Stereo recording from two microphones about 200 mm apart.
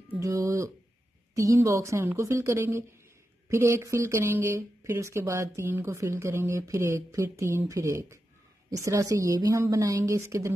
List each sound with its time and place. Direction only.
0.1 s speech: 15° right (ahead or behind)